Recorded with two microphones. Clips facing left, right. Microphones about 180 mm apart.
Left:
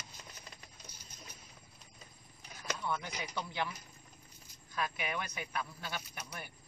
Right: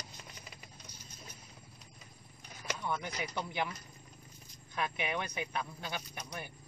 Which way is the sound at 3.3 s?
20° right (ahead or behind).